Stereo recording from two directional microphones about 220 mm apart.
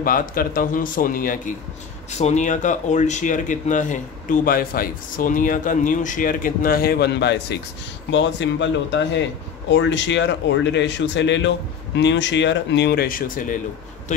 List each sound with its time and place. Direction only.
0.0 s speech: 40° left (ahead or behind)